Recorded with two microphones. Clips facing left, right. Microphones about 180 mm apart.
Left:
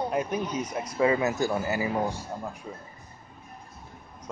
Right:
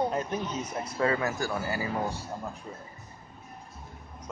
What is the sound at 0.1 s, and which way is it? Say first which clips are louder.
Speech: left 3 dB; 10° left (ahead or behind).